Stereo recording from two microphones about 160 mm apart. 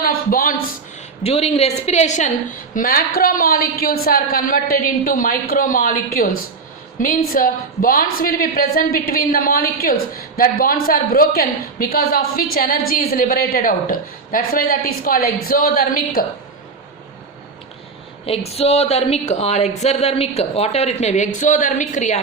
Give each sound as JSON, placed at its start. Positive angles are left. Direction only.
{"t": 0.0, "sound": "speech", "side_deg": 65}
{"t": 1.2, "sound": "a woman's voice", "side_deg": 40}
{"t": 2.7, "sound": "a woman's voice", "side_deg": 65}
{"t": 18.3, "sound": "a woman's voice", "side_deg": 40}